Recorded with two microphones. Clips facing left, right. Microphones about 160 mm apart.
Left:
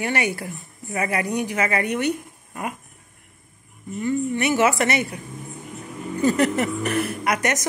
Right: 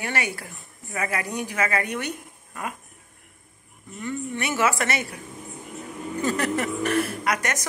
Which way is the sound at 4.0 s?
15° left (ahead or behind).